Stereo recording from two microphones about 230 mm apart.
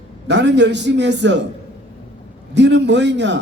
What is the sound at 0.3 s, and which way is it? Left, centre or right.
A man's voice, right.